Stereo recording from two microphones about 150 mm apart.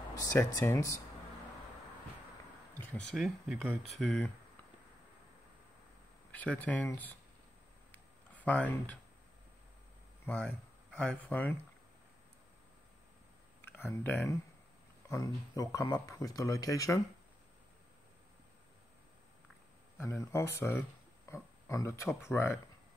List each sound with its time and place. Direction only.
0.2 s a sound: 20° left (ahead or behind)
0.7 s speech: 20° left (ahead or behind)
2.8 s speech: 10° left (ahead or behind)
6.3 s speech: 10° left (ahead or behind)
7.9 s a sound: 10° left (ahead or behind)
10.2 s speech: 10° left (ahead or behind)
13.6 s speech: 15° left (ahead or behind)
15.0 s speech: 25° left (ahead or behind)
20.0 s speech: 20° left (ahead or behind)